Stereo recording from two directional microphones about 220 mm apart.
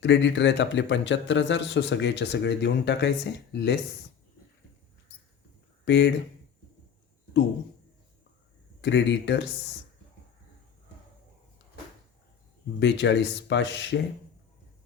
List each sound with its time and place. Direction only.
0.0 s speech: 55° left (ahead or behind)
5.8 s speech: 55° left (ahead or behind)
8.8 s speech: 55° left (ahead or behind)
12.8 s speech: 55° left (ahead or behind)